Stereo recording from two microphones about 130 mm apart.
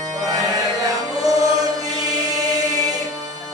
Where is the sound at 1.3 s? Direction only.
25° right (ahead or behind).